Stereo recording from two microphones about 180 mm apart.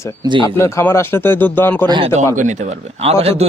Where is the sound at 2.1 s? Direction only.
45° right (ahead or behind).